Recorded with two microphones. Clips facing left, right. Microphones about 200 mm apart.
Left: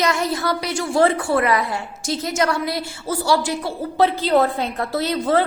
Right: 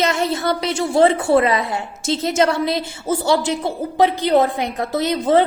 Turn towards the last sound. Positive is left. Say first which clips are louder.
# right 3 dB
turn(degrees=-20)  # may be behind; listen again after turning